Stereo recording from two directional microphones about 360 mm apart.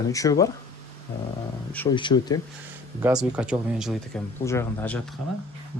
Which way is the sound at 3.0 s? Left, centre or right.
Centre.